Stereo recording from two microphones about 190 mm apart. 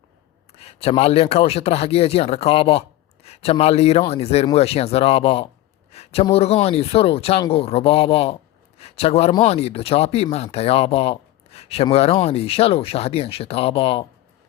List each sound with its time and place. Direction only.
0.5 s a man's voice: 30° left (ahead or behind)